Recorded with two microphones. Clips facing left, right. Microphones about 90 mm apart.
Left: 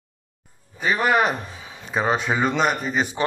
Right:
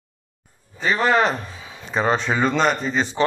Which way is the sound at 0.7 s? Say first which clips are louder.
Right 1 dB; 15° left (ahead or behind).